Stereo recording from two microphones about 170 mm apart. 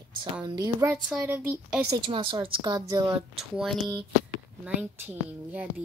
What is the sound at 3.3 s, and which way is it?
A woman's voice, centre (ahead or behind).